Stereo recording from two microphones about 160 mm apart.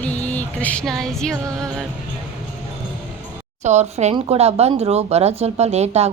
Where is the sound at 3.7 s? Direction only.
45° right (ahead or behind).